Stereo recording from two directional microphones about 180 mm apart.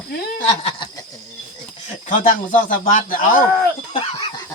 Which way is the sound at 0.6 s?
25° left (ahead or behind).